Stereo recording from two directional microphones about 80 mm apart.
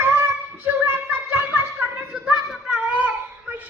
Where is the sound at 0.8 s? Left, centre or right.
Right.